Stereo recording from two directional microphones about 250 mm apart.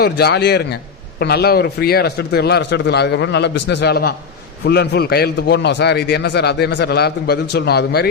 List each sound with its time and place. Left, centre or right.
0.0 s a man's voice: left